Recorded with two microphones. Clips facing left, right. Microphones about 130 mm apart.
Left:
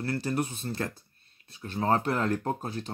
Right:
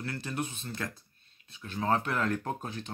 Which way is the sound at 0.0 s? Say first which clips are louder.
Left 6 dB; 35° left (ahead or behind).